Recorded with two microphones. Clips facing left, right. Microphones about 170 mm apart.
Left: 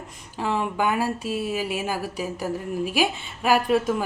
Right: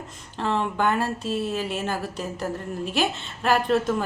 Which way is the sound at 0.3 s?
10° left (ahead or behind).